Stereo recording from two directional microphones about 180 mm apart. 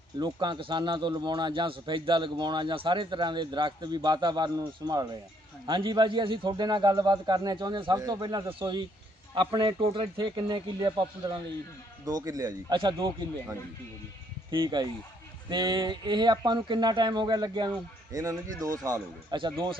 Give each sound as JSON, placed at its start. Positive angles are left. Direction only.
{"t": 0.2, "sound": "speech", "side_deg": -25}